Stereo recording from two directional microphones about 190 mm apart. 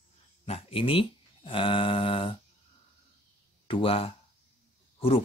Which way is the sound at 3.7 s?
30° left (ahead or behind).